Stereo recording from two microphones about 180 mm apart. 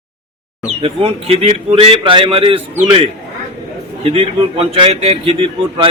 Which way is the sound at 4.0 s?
30° right (ahead or behind).